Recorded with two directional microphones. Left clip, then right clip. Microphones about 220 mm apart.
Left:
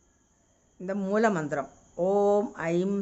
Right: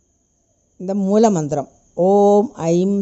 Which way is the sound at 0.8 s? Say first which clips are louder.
Right 10 dB; 35° right (ahead or behind).